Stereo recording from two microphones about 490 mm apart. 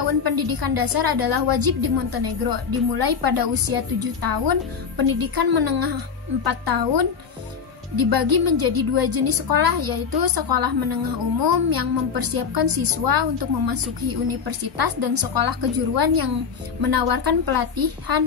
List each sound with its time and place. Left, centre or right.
0.0 s speech: right